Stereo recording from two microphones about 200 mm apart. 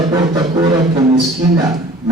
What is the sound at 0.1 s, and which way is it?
A man's voice, 20° right (ahead or behind).